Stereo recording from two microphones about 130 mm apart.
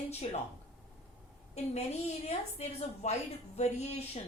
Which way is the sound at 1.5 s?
55° left (ahead or behind).